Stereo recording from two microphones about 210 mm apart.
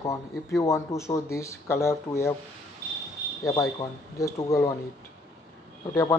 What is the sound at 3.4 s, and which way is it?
Speech, 15° left (ahead or behind).